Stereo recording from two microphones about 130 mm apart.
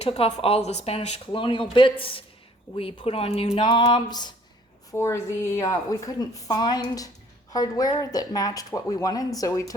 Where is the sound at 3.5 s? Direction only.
40° left (ahead or behind).